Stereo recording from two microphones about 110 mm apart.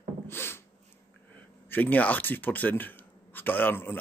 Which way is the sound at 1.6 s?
15° left (ahead or behind).